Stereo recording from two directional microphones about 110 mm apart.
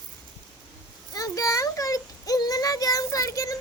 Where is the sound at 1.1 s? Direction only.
30° left (ahead or behind).